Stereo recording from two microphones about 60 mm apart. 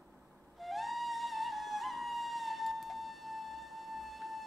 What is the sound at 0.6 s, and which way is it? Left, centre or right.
Music, centre.